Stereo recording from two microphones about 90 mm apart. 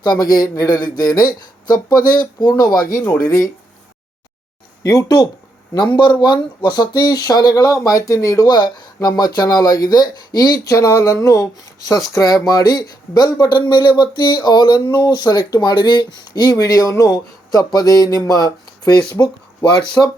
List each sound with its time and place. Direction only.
0.0 s speech: 45° left (ahead or behind)
3.1 s a sound: 40° left (ahead or behind)
4.8 s speech: 40° left (ahead or behind)
5.7 s speech: 60° left (ahead or behind)
10.6 s a sound: 35° left (ahead or behind)
12.1 s speech: 40° left (ahead or behind)
19.2 s speech: 30° left (ahead or behind)